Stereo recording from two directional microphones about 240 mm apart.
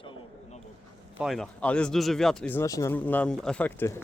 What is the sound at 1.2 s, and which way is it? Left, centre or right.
Speech, centre.